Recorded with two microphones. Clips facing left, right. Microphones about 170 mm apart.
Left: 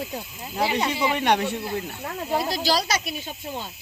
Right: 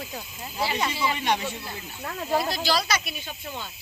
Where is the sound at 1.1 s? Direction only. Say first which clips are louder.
Left 5 dB; 60° left (ahead or behind).